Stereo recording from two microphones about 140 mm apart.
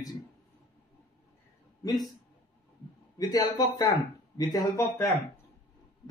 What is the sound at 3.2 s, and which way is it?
Speech, 30° left (ahead or behind).